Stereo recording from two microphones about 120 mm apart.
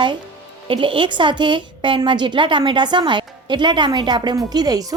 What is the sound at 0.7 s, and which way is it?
A woman's voice, 45° right (ahead or behind).